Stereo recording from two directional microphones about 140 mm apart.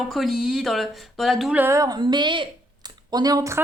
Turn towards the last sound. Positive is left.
turn(degrees=-20)  # may be behind; listen again after turning